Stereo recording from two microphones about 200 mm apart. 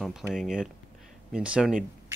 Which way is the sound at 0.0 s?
Centre (ahead or behind).